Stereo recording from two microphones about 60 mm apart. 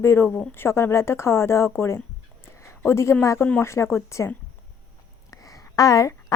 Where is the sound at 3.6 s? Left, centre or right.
Left.